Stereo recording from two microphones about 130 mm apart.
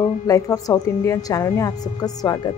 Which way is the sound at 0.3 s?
25° left (ahead or behind).